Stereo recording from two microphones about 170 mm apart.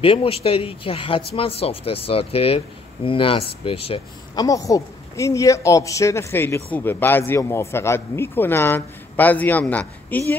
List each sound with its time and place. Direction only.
0.0 s speech: 30° left (ahead or behind)
4.4 s speech: 20° left (ahead or behind)